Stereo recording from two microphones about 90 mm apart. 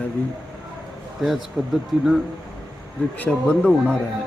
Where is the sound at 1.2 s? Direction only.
5° right (ahead or behind).